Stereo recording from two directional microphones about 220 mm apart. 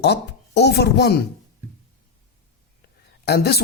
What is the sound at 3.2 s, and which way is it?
Speech, 45° left (ahead or behind).